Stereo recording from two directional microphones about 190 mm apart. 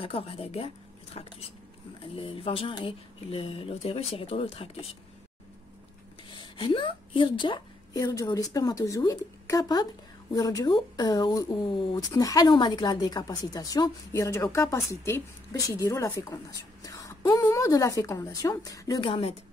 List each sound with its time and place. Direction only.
0.0 s speech: 30° left (ahead or behind)
1.1 s a sound: 35° left (ahead or behind)
2.1 s speech: 30° left (ahead or behind)
6.3 s a woman's voice: 25° left (ahead or behind)